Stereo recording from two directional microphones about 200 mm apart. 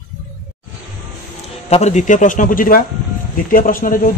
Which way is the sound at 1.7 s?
35° left (ahead or behind).